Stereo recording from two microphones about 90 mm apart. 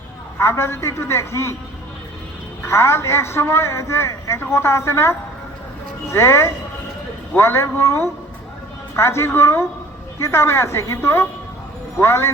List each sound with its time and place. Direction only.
0.3 s a man's voice: 30° left (ahead or behind)
2.6 s a man's voice: 30° left (ahead or behind)